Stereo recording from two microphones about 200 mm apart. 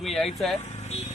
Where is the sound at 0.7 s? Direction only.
35° left (ahead or behind).